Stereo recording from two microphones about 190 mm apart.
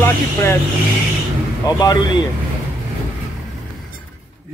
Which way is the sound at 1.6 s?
20° left (ahead or behind).